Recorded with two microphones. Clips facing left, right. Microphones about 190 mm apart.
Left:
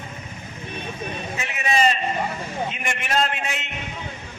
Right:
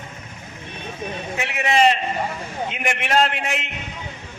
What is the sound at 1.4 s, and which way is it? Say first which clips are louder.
A man's voice: right 4 dB; 70° right (ahead or behind).